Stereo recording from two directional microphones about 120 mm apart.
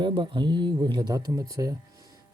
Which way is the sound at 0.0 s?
40° right (ahead or behind).